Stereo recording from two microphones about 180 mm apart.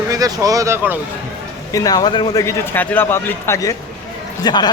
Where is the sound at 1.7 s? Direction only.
20° left (ahead or behind).